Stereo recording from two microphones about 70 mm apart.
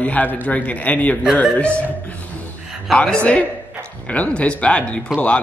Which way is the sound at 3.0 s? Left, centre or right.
Centre.